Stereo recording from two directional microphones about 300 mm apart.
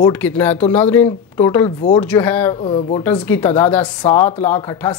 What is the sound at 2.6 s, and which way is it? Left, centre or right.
Speech, centre.